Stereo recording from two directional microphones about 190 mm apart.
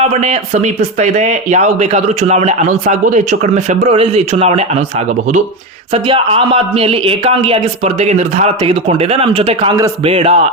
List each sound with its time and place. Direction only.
0.1 s a man's voice: 35° right (ahead or behind)
5.9 s a man's voice: 30° right (ahead or behind)